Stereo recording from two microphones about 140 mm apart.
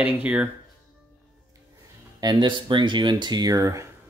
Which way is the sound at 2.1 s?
30° right (ahead or behind).